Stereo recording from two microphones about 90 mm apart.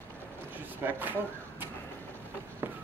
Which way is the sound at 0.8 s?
20° right (ahead or behind).